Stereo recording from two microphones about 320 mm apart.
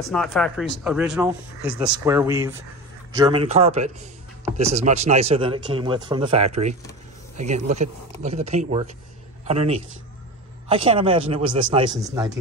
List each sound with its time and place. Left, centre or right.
0.1 s a man's voice: centre